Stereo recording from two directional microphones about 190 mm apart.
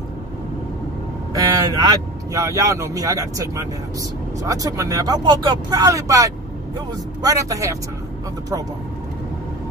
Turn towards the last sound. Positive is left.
turn(degrees=-15)  # may be behind; listen again after turning